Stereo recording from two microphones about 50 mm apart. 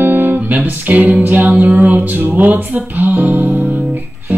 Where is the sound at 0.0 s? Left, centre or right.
Right.